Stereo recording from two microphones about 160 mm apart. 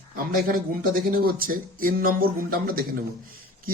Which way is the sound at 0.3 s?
65° right (ahead or behind).